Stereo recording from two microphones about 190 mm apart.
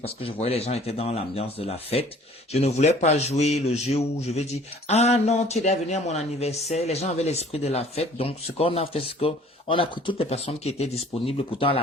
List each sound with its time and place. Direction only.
0.0 s speech: 30° left (ahead or behind)